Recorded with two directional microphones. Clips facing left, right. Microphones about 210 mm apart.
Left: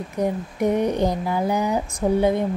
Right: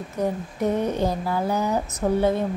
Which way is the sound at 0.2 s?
15° left (ahead or behind).